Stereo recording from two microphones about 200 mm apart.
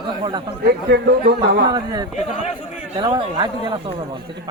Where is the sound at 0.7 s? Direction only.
55° right (ahead or behind).